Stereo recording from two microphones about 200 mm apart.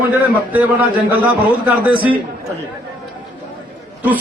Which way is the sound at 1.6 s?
10° right (ahead or behind).